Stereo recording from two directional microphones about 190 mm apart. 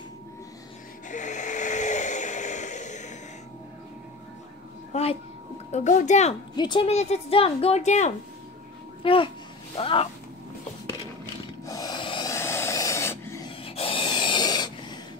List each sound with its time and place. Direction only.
1.0 s a sound: 40° left (ahead or behind)
4.9 s a sound: 35° left (ahead or behind)
5.7 s speech: 40° left (ahead or behind)
6.5 s a child's voice: 25° left (ahead or behind)
11.6 s rub: 20° left (ahead or behind)
13.7 s snort: 30° left (ahead or behind)